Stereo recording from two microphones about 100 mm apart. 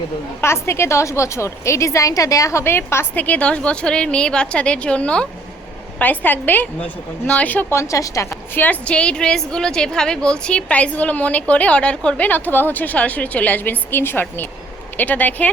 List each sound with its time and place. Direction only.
0.4 s a woman's voice: 25° left (ahead or behind)
8.5 s a woman's voice: 15° left (ahead or behind)